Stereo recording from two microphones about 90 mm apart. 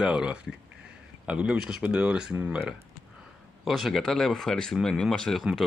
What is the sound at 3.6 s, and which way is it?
Speech, centre (ahead or behind).